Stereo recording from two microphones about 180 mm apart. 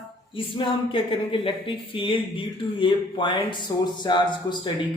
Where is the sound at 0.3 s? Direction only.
30° left (ahead or behind).